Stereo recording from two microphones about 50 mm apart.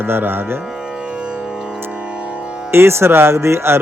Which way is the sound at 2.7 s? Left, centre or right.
Right.